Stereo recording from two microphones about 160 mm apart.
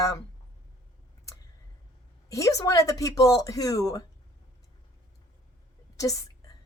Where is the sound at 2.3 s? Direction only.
20° left (ahead or behind).